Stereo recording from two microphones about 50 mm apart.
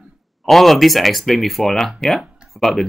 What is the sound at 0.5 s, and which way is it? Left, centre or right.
Speech, centre.